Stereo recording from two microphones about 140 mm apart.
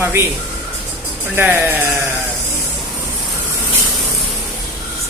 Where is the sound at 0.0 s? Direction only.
20° right (ahead or behind).